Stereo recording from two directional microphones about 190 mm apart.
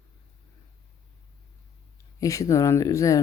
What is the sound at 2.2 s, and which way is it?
Speech, 15° left (ahead or behind).